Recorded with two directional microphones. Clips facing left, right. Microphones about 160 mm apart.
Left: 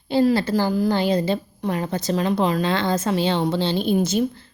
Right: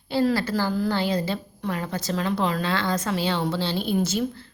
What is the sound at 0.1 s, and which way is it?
A woman's voice, 20° left (ahead or behind).